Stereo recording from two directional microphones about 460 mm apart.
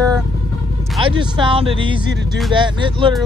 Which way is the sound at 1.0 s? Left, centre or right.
Centre.